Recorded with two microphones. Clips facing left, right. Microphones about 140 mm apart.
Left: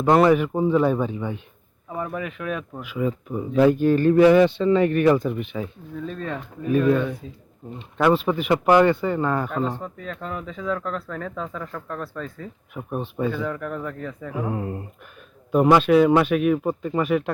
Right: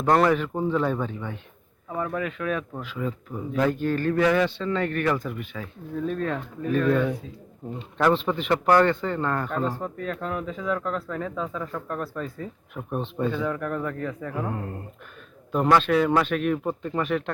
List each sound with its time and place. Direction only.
0.0 s a man's voice: 10° left (ahead or behind)
6.1 s a man's voice: centre (ahead or behind)
12.9 s a man's voice: 5° left (ahead or behind)